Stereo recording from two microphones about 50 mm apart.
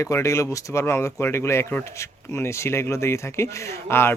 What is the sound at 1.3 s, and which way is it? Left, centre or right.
Speech, left.